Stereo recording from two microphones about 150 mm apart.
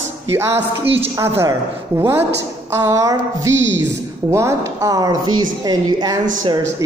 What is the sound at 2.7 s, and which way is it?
Speech, 20° right (ahead or behind).